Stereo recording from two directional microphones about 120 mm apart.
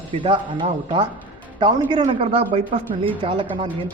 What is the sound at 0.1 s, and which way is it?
Speech, 45° right (ahead or behind).